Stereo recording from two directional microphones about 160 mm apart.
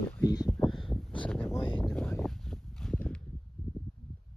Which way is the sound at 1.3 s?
10° left (ahead or behind).